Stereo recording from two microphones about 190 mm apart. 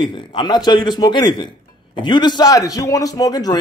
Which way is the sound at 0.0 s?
25° left (ahead or behind).